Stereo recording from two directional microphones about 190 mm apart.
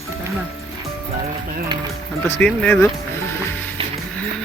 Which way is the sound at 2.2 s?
10° left (ahead or behind).